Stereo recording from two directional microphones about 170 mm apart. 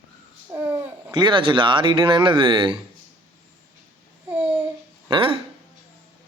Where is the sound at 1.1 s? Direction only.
25° right (ahead or behind).